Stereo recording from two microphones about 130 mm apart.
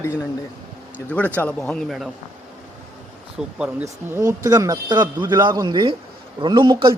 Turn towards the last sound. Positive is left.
turn(degrees=-40)  # may be behind; listen again after turning